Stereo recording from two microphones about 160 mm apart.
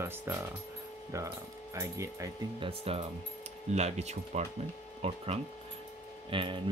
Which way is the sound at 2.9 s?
35° right (ahead or behind).